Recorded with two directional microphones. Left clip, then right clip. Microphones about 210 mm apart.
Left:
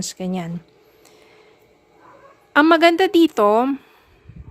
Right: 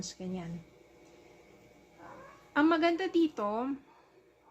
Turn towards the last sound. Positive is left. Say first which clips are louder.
# left 17 dB
turn(degrees=55)  # may be behind; listen again after turning